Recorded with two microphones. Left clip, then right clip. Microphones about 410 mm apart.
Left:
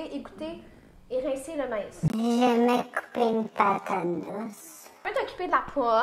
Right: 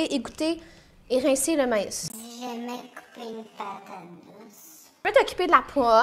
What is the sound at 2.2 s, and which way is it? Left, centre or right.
A woman's voice, left.